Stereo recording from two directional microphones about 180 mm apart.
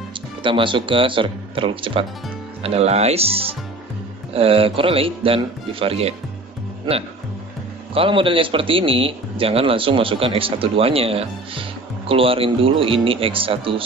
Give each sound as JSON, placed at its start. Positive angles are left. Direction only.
{"t": 0.4, "sound": "a man's voice", "side_deg": -30}
{"t": 7.9, "sound": "a man's voice", "side_deg": -30}